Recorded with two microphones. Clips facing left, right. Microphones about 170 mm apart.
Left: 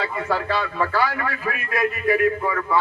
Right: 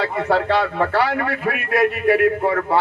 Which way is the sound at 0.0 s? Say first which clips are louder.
Right 5 dB; 70° right (ahead or behind).